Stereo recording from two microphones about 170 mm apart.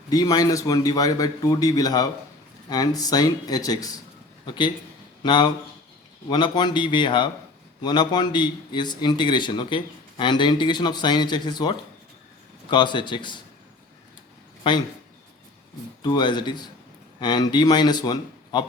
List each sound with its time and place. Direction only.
0.1 s a man's voice: 20° left (ahead or behind)
12.7 s a man's voice: 25° left (ahead or behind)
14.6 s speech: 25° left (ahead or behind)
16.0 s a man's voice: 25° left (ahead or behind)